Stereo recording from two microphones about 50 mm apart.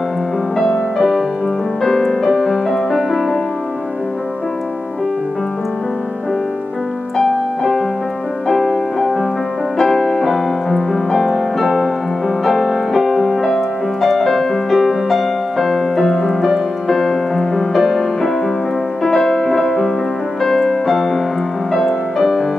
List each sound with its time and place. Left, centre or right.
1.8 s music: centre
7.2 s music: centre
20.4 s piano: centre
21.8 s music: centre